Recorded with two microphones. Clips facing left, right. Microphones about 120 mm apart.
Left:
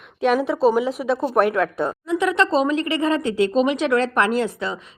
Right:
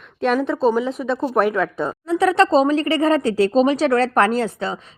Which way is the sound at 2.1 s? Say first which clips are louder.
Right 5 dB; 35° right (ahead or behind).